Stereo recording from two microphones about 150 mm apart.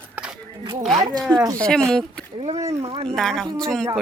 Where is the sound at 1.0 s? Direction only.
25° right (ahead or behind).